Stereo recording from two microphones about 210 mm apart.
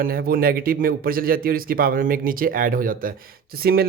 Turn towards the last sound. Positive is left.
turn(degrees=-45)  # may be behind; listen again after turning